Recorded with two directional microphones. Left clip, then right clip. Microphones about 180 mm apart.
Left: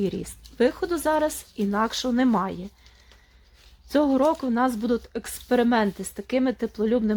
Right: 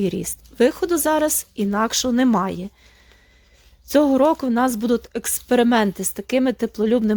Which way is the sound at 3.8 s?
35° right (ahead or behind).